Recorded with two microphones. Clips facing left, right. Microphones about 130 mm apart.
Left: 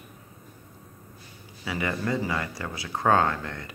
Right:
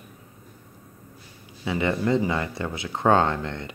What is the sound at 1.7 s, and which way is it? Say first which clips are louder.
Speech: right 5 dB; 25° right (ahead or behind).